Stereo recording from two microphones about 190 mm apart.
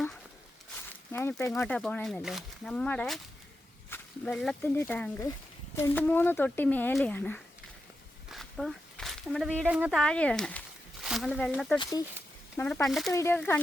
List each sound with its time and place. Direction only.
0.9 s a sound: 10° left (ahead or behind)
1.5 s speech: 5° left (ahead or behind)
8.3 s a sound: centre (ahead or behind)
9.6 s speech: 5° right (ahead or behind)
11.8 s speech: 20° left (ahead or behind)
12.5 s speech: 5° left (ahead or behind)
13.1 s speech: 10° left (ahead or behind)